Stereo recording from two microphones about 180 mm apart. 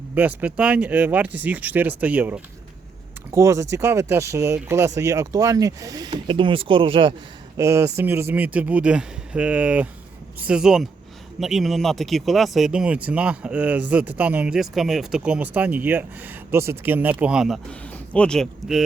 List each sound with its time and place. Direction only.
0.1 s speech: 10° right (ahead or behind); by 7.1 s 30° right (ahead or behind)
7.5 s speech: 15° right (ahead or behind); by 18.8 s 5° left (ahead or behind)